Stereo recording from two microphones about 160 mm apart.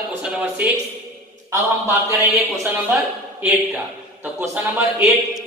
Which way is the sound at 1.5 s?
15° right (ahead or behind).